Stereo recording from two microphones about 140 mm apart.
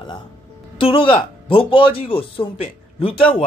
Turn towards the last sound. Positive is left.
turn(degrees=40)  # may be behind; listen again after turning